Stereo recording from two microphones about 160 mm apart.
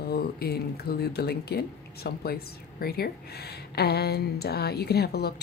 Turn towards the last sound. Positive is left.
turn(degrees=85)